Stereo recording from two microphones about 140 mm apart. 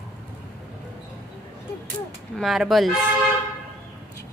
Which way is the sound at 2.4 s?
Centre (ahead or behind).